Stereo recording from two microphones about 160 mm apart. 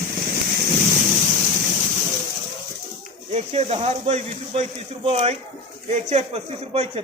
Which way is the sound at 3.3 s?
45° right (ahead or behind).